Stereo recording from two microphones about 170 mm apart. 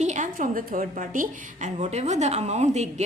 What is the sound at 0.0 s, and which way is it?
A woman's voice, 45° right (ahead or behind).